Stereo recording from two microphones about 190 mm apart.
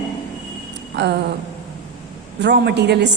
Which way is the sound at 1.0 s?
65° right (ahead or behind).